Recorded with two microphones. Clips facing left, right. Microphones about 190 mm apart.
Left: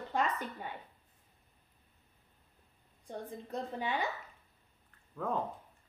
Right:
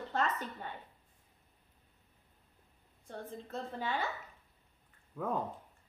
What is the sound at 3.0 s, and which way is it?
A woman's voice, 15° left (ahead or behind).